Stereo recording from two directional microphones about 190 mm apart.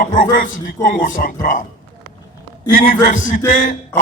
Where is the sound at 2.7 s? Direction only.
50° left (ahead or behind).